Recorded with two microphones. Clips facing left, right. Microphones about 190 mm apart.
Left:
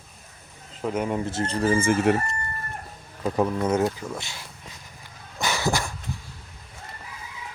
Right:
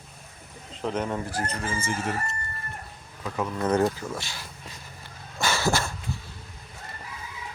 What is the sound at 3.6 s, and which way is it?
Speech, 5° left (ahead or behind).